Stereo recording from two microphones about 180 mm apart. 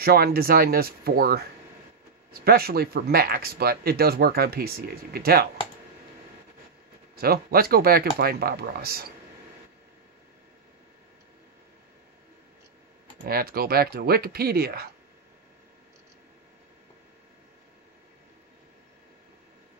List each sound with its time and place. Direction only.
0.0 s speech: 60° right (ahead or behind)
7.2 s speech: 60° right (ahead or behind)
13.2 s speech: 55° right (ahead or behind)